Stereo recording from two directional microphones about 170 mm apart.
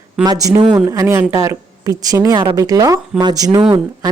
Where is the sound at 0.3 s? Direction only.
20° right (ahead or behind).